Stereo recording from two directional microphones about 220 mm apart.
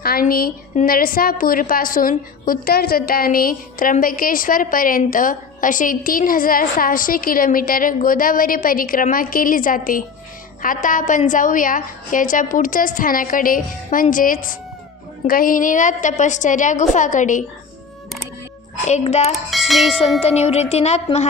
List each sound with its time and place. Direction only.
0.0 s a woman's voice: 45° left (ahead or behind)
18.9 s speech: 30° left (ahead or behind)
19.5 s speech: centre (ahead or behind)
20.2 s speech: 30° left (ahead or behind)